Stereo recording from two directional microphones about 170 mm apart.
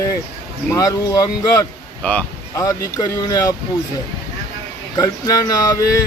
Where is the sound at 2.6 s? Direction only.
20° left (ahead or behind).